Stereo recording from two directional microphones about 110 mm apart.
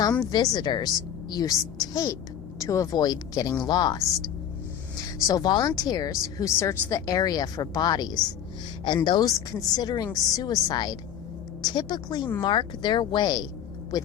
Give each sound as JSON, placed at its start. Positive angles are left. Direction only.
{"t": 0.3, "sound": "speech", "side_deg": 40}